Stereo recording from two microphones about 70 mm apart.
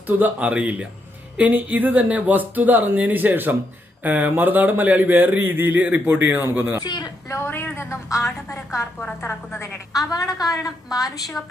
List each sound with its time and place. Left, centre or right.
0.2 s speech: centre; by 6.8 s right
6.8 s a woman's voice: left
7.3 s a woman's voice: left
7.9 s a woman's voice: left
9.2 s a woman's voice: left
9.9 s a woman's voice: left